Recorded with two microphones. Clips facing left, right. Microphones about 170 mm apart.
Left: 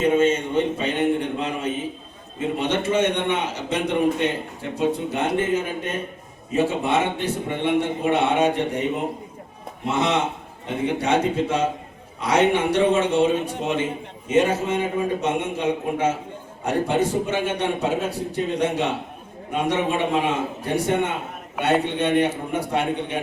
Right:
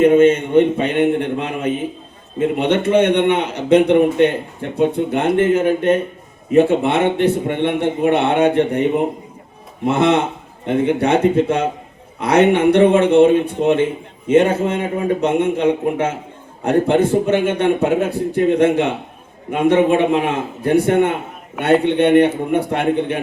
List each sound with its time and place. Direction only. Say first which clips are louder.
0.0 s a man's voice: right 8 dB; 60° right (ahead or behind)
9.8 s a man's voice: right 7 dB; 55° right (ahead or behind)